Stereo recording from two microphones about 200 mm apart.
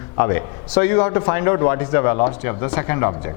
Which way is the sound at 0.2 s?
20° left (ahead or behind).